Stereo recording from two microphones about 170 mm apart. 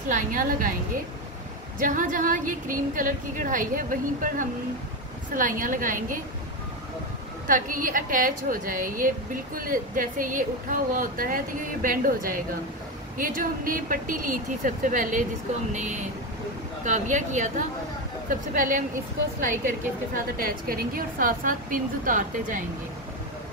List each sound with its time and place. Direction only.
0.1 s a woman's voice: 50° right (ahead or behind)
1.8 s a woman's voice: 50° right (ahead or behind)
7.4 s a woman's voice: 50° right (ahead or behind)
20.4 s a woman's voice: 60° right (ahead or behind)